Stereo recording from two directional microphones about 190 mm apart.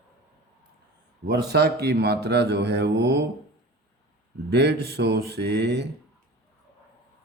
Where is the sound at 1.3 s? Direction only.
60° right (ahead or behind).